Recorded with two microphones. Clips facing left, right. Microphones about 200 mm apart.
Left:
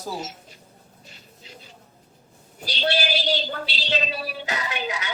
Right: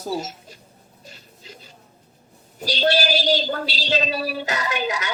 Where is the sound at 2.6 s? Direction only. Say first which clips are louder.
Right 5 dB; 40° right (ahead or behind).